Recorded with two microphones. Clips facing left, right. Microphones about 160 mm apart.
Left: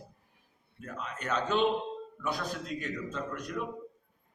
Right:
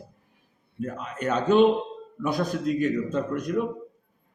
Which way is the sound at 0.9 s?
10° right (ahead or behind).